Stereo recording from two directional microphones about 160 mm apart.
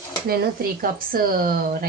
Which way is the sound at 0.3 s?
70° right (ahead or behind).